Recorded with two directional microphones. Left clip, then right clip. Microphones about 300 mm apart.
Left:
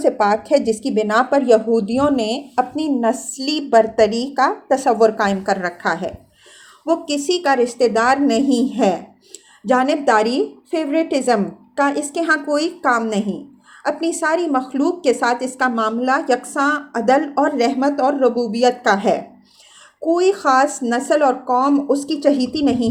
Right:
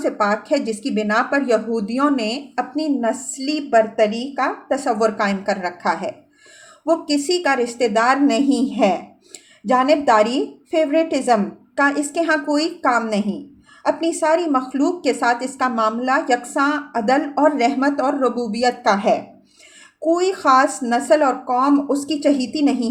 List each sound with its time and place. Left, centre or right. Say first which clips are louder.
0.0 s a woman's voice: left 3 dB; centre